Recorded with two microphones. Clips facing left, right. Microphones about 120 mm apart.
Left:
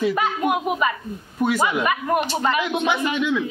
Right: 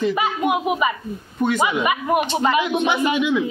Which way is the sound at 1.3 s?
5° left (ahead or behind).